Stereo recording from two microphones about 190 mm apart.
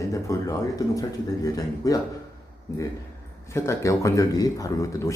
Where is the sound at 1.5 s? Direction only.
20° left (ahead or behind).